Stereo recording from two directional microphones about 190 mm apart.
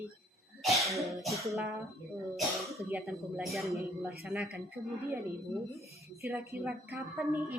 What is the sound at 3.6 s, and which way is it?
Speech, 15° right (ahead or behind).